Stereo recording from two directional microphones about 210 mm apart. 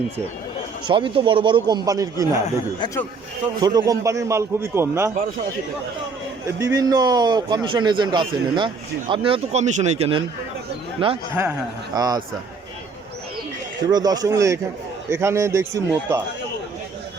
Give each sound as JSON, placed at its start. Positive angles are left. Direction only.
{"t": 0.9, "sound": "a man's voice", "side_deg": -25}
{"t": 2.8, "sound": "a man's voice", "side_deg": 15}
{"t": 3.4, "sound": "a man's voice", "side_deg": -20}
{"t": 6.6, "sound": "a man's voice", "side_deg": -15}
{"t": 13.8, "sound": "a man's voice", "side_deg": -20}